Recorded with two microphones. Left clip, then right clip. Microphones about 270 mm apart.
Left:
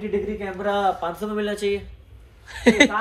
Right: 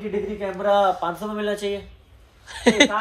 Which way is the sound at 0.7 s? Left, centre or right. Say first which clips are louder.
Right 3 dB; centre.